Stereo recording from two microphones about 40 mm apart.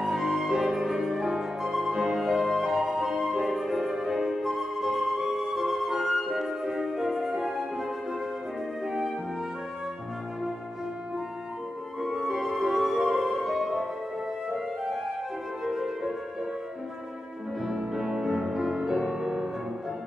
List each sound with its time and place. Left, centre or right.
0.0 s music: centre
12.0 s music: centre
15.6 s music: centre
17.6 s music: centre